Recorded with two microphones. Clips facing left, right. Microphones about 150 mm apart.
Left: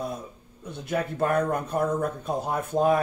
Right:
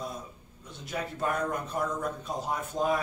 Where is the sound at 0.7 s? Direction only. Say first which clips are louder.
Left 7 dB; 60° left (ahead or behind).